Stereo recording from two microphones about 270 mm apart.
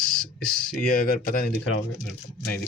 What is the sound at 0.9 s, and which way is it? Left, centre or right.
Speech, left.